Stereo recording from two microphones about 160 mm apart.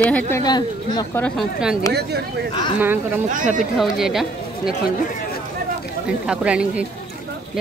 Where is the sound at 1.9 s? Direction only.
90° right.